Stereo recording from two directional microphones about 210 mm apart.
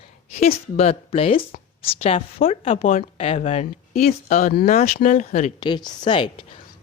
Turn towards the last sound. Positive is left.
turn(degrees=25)  # may be behind; listen again after turning